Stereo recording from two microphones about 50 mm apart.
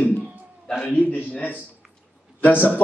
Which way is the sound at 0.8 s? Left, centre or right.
Left.